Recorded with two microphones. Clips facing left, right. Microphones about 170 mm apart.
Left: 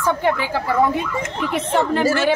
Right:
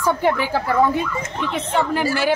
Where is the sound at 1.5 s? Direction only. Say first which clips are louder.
Left 2 dB; 5° right (ahead or behind).